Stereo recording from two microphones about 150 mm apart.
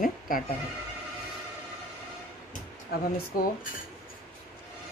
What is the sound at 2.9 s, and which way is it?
Speech, 90° left.